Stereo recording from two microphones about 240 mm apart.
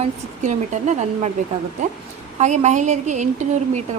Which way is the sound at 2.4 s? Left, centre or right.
Right.